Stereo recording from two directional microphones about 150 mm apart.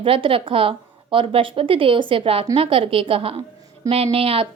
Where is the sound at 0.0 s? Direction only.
35° right (ahead or behind).